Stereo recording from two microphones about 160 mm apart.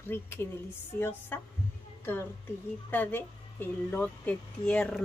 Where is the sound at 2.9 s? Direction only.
10° left (ahead or behind).